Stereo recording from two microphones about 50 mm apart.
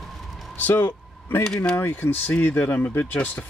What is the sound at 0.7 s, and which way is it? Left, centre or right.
Speech, left.